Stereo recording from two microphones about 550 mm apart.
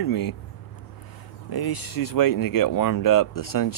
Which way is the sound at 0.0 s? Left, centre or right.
Left.